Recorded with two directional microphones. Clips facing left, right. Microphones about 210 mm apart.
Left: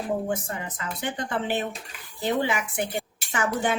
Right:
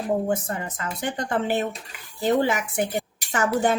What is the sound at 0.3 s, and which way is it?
A woman's voice, 45° right (ahead or behind).